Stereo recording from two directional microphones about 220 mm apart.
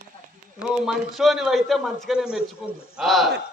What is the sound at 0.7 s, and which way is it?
A man's voice, centre (ahead or behind).